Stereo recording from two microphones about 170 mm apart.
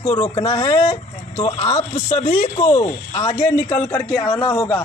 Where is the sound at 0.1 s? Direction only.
15° left (ahead or behind).